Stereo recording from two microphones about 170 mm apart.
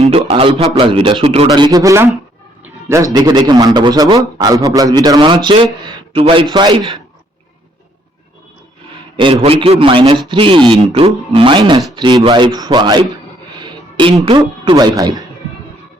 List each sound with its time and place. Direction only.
0.0 s speech: 35° right (ahead or behind)
1.5 s a man's voice: 25° right (ahead or behind)
9.1 s a man's voice: 35° right (ahead or behind)